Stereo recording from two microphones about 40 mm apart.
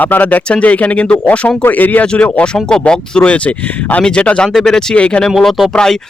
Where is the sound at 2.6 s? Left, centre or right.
Left.